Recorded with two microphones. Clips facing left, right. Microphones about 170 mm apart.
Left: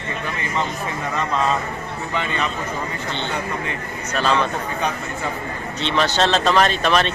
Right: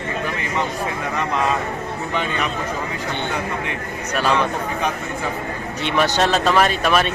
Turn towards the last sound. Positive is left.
turn(degrees=-10)  # may be behind; listen again after turning